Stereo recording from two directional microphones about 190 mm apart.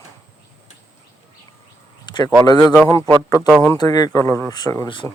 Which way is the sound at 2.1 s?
25° left (ahead or behind).